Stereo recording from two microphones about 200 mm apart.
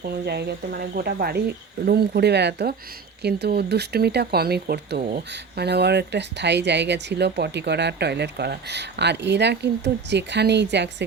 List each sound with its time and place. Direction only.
0.0 s speech: 55° right (ahead or behind)